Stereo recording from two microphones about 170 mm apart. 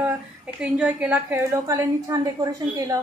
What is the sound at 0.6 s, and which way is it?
A woman's voice, 5° right (ahead or behind).